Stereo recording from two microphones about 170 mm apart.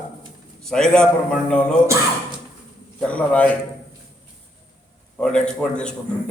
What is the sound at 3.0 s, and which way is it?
Speech, 5° left (ahead or behind).